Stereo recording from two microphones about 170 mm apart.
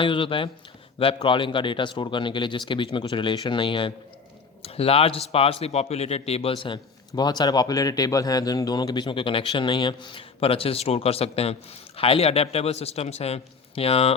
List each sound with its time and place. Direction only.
0.0 s a man's voice: 30° left (ahead or behind)